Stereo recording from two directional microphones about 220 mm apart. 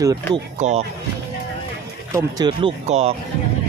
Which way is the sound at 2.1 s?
20° right (ahead or behind).